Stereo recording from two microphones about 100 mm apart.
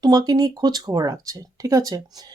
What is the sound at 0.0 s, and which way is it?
Speech, 40° right (ahead or behind).